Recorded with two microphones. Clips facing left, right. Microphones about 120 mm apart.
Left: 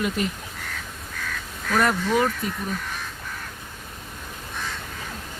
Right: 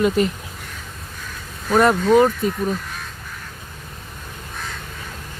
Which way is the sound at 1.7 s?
30° right (ahead or behind).